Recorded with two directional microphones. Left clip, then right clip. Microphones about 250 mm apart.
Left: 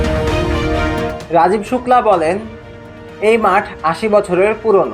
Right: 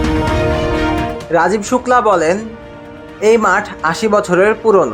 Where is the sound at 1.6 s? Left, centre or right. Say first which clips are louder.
Even; right.